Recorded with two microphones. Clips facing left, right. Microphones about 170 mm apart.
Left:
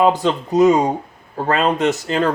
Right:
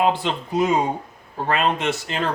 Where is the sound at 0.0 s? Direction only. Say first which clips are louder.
Left 5 dB; 40° left (ahead or behind).